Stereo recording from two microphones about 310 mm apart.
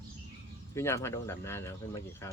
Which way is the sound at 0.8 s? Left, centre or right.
Centre.